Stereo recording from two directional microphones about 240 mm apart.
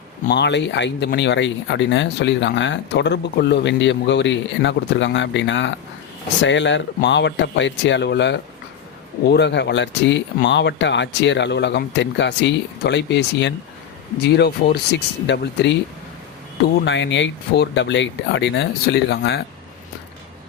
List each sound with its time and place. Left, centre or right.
0.3 s speech: left
16.8 s speech: left